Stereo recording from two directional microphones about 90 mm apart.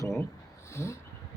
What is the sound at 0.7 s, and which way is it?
Cat, 30° left (ahead or behind).